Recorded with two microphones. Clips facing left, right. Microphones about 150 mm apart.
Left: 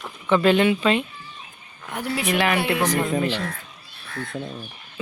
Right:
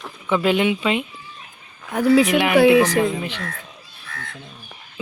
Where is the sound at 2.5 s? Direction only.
90° right.